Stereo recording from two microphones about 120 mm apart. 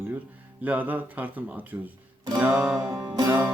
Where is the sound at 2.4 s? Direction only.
20° right (ahead or behind).